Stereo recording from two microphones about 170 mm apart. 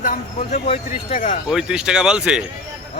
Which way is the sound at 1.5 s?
5° right (ahead or behind).